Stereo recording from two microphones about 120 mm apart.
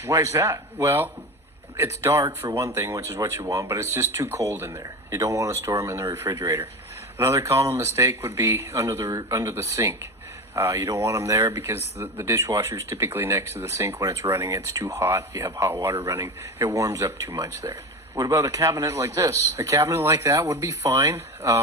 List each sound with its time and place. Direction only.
0.0 s speech: 25° right (ahead or behind)